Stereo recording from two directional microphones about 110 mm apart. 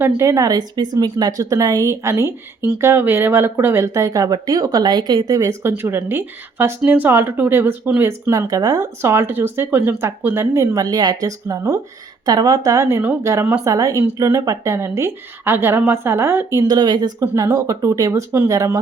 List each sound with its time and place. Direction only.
0.2 s a woman's voice: 30° right (ahead or behind)
9.0 s a woman's voice: 20° right (ahead or behind); by 17.1 s 40° right (ahead or behind)
17.2 s a woman's voice: 25° right (ahead or behind)